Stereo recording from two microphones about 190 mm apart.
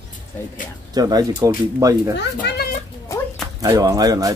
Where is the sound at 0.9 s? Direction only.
20° right (ahead or behind).